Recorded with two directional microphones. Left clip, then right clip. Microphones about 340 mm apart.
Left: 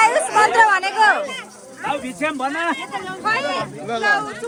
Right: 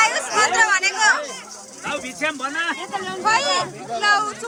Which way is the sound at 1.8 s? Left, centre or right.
Centre.